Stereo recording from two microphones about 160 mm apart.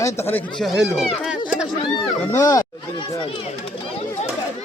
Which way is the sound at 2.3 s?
20° left (ahead or behind).